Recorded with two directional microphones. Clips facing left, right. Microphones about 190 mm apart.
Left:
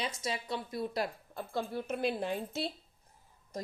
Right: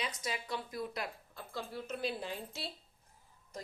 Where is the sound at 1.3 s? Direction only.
50° left (ahead or behind).